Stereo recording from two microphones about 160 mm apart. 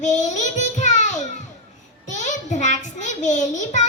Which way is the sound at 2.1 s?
50° left (ahead or behind).